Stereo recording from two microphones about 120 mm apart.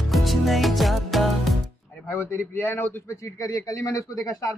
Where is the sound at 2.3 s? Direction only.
20° left (ahead or behind).